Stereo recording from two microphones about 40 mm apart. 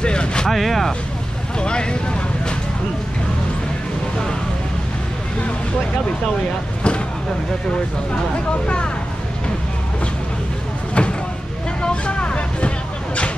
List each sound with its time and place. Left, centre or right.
0.0 s a sound: left
0.5 s speech: centre
1.6 s speech: left
8.6 s speech: left
11.0 s vehicle: left